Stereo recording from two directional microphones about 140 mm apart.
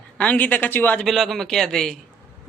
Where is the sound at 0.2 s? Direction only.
10° left (ahead or behind).